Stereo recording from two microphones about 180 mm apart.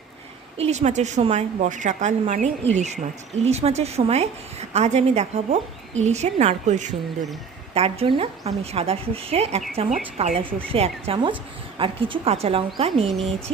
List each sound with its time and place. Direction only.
0.5 s a woman's voice: 35° right (ahead or behind)